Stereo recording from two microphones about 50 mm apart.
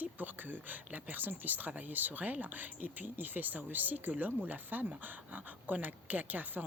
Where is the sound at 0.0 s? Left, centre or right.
Right.